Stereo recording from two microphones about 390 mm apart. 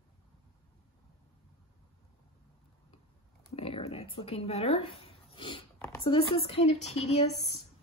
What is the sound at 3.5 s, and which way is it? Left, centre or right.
A woman's voice, centre.